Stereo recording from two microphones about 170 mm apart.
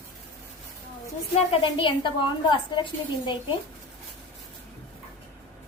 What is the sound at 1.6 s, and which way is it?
A woman's voice, 30° left (ahead or behind).